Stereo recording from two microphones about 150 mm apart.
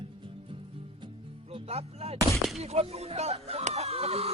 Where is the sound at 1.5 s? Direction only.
45° right (ahead or behind).